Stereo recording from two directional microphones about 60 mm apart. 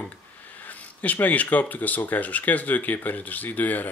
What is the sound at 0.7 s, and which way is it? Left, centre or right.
Speech, left.